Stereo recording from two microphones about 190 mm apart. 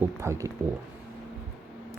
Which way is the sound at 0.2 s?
15° right (ahead or behind).